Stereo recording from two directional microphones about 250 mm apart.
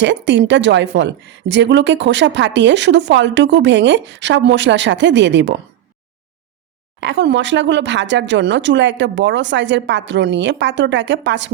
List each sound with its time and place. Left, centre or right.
0.0 s a woman's voice: right
7.0 s a woman's voice: right